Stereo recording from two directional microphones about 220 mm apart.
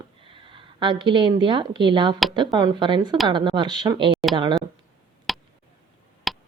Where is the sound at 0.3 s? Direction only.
25° right (ahead or behind).